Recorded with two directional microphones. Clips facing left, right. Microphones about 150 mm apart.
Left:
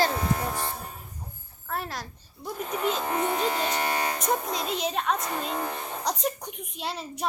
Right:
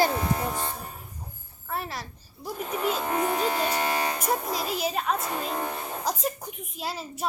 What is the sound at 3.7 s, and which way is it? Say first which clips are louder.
Music: right 1 dB; 15° right (ahead or behind).